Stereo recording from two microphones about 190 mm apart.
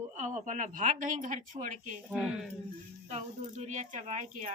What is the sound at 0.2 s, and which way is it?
A woman's voice, 40° right (ahead or behind).